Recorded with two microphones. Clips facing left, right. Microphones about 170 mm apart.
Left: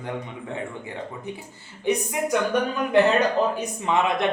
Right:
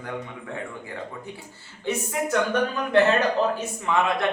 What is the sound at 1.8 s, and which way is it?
Speech, 15° left (ahead or behind).